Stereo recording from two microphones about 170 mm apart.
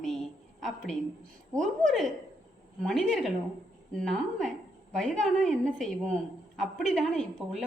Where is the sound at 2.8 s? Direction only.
5° left (ahead or behind).